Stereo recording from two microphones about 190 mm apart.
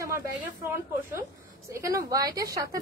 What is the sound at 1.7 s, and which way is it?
A woman's voice, 15° right (ahead or behind).